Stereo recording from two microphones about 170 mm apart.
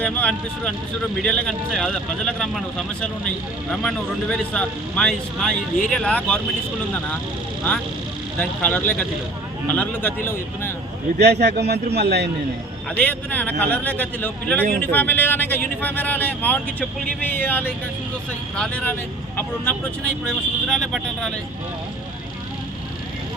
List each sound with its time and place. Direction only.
0.0 s speech: 5° left (ahead or behind)
8.4 s speech: 10° left (ahead or behind)
11.2 s a man's voice: 75° right (ahead or behind)
13.0 s speech: 10° left (ahead or behind)